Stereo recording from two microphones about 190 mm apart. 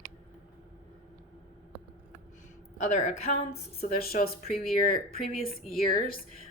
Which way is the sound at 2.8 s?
40° left (ahead or behind).